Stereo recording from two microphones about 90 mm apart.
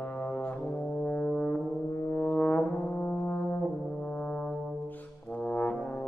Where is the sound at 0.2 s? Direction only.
15° left (ahead or behind).